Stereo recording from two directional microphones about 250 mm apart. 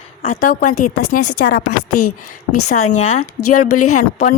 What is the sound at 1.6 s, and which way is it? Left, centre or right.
A woman's voice, left.